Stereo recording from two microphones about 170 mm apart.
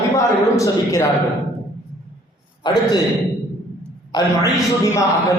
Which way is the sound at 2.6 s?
20° left (ahead or behind).